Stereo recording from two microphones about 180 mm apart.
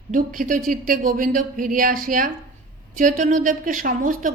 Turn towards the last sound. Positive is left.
turn(degrees=-45)  # may be behind; listen again after turning